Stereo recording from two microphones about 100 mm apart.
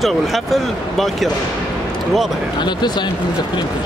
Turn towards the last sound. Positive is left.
turn(degrees=45)  # may be behind; listen again after turning